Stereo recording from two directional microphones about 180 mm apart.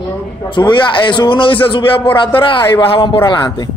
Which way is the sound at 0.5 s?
25° left (ahead or behind).